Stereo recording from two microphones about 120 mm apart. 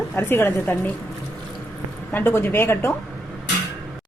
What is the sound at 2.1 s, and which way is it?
Speech, 20° left (ahead or behind).